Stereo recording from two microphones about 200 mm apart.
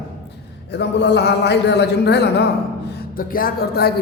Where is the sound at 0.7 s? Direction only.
60° left (ahead or behind).